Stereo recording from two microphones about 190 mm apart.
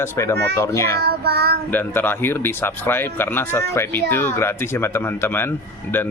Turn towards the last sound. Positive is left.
turn(degrees=10)  # may be behind; listen again after turning